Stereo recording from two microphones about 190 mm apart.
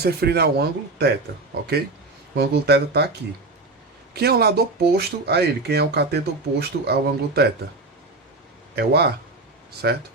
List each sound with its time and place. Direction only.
0.0 s speech: 55° right (ahead or behind)
2.3 s speech: 60° right (ahead or behind)
4.1 s speech: 55° right (ahead or behind)
8.7 s a man's voice: 60° right (ahead or behind)